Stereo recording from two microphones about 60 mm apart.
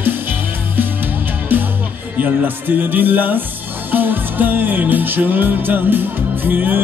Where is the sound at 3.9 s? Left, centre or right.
Right.